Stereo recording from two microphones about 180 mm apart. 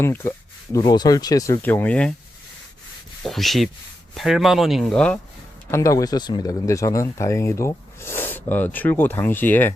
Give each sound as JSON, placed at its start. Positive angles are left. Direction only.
{"t": 0.0, "sound": "speech", "side_deg": 15}
{"t": 3.2, "sound": "speech", "side_deg": 0}
{"t": 5.7, "sound": "speech", "side_deg": 15}